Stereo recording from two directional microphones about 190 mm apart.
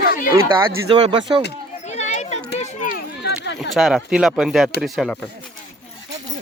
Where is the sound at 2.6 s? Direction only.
45° left (ahead or behind).